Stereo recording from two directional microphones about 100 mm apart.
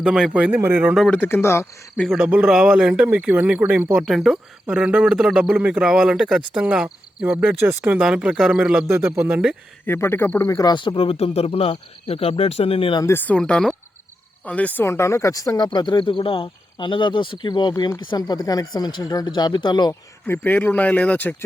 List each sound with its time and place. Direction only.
0.0 s speech: 5° right (ahead or behind)
1.1 s speech: 20° left (ahead or behind)
2.0 s speech: 5° right (ahead or behind)
4.0 s speech: 5° right (ahead or behind)
7.6 s speech: 20° right (ahead or behind)
8.9 s speech: 25° right (ahead or behind)
9.8 s speech: 20° left (ahead or behind)
10.9 s speech: 75° left (ahead or behind)
13.1 s speech: 15° left (ahead or behind)
14.8 s speech: 30° left (ahead or behind); by 19.9 s 50° left (ahead or behind)
19.9 s speech: 25° left (ahead or behind)